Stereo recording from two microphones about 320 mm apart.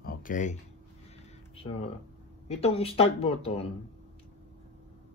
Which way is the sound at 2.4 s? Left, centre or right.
Centre.